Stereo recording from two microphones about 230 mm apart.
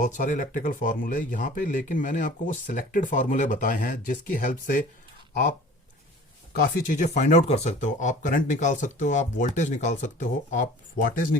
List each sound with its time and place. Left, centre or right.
0.0 s speech: left
6.5 s speech: left